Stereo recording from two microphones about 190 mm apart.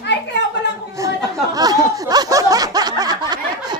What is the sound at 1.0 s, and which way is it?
Chatter, 15° right (ahead or behind).